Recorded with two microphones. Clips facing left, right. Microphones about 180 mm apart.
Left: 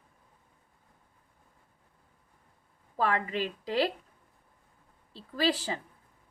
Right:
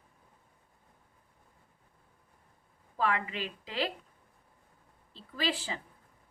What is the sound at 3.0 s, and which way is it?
Speech, 40° left (ahead or behind).